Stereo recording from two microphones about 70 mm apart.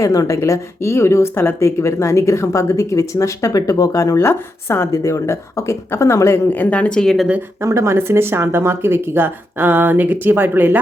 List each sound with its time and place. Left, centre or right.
0.0 s speech: left
4.2 s speech: left
6.5 s speech: left
7.6 s speech: right